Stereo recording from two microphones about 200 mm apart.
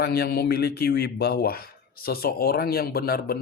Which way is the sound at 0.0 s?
55° left (ahead or behind).